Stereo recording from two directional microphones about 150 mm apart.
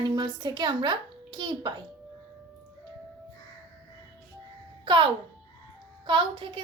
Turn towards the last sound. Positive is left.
turn(degrees=-35)  # may be behind; listen again after turning